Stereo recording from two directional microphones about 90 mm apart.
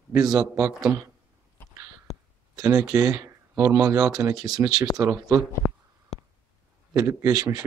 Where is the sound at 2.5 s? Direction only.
40° right (ahead or behind).